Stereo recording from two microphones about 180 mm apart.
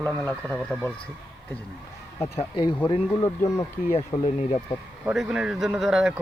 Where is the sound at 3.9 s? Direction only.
35° left (ahead or behind).